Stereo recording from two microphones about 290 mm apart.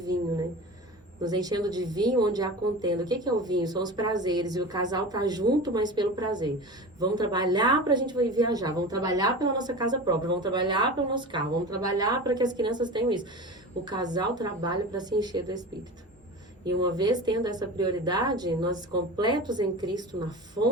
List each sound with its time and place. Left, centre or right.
1.2 s speech: centre
16.6 s speech: centre